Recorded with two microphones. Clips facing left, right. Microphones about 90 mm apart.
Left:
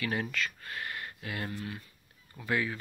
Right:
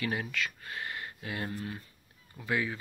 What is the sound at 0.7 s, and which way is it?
Speech, 20° right (ahead or behind).